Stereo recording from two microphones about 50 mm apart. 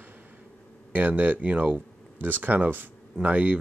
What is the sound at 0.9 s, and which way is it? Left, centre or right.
Speech, right.